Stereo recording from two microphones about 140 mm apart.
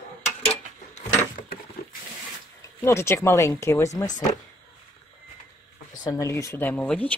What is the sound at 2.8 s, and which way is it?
Speech, 20° left (ahead or behind).